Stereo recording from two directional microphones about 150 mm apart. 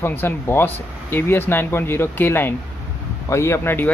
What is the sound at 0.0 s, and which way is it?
Speech, 15° left (ahead or behind).